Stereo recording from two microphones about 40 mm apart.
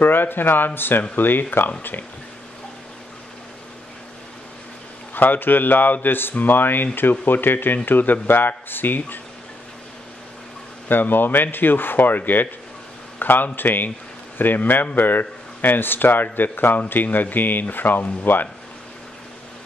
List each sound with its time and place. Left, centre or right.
0.0 s speech: left
5.1 s speech: left
10.9 s speech: left